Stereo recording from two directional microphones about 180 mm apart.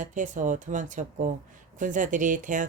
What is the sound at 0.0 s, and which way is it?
Speech, 45° right (ahead or behind).